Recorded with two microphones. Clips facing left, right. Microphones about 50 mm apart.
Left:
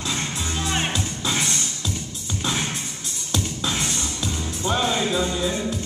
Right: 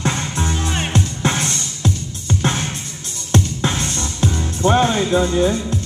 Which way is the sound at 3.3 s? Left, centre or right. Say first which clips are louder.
Right 7 dB; right.